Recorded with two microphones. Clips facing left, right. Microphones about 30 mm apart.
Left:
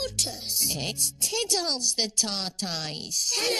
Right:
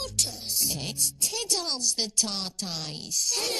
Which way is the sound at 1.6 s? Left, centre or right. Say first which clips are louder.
Left 2 dB; left.